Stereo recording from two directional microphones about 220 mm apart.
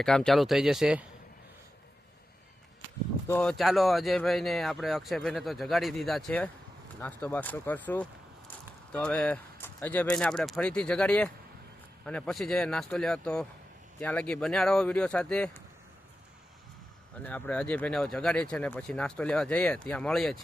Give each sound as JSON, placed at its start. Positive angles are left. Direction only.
{"t": 0.0, "sound": "speech", "side_deg": 0}
{"t": 3.2, "sound": "speech", "side_deg": 5}
{"t": 17.2, "sound": "speech", "side_deg": 5}